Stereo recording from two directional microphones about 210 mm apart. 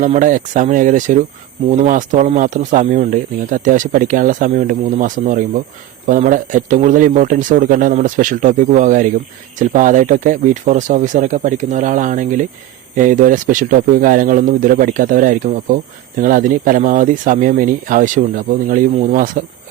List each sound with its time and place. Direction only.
0.0 s speech: 35° right (ahead or behind)